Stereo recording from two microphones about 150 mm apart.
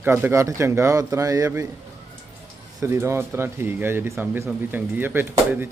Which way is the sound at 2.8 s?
15° right (ahead or behind).